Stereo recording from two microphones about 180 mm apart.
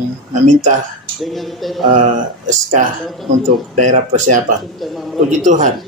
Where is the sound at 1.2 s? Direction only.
Centre (ahead or behind).